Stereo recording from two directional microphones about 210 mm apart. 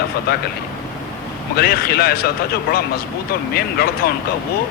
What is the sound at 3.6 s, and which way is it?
Speech, 50° left (ahead or behind).